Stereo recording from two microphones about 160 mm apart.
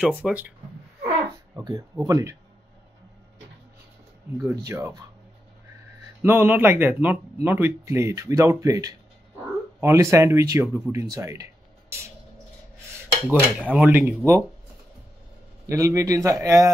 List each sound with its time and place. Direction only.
0.0 s speech: 5° right (ahead or behind)
1.6 s speech: 25° right (ahead or behind)
4.4 s speech: 15° right (ahead or behind)
6.2 s speech: 15° right (ahead or behind)
13.3 s speech: 10° right (ahead or behind)
15.6 s speech: 20° right (ahead or behind)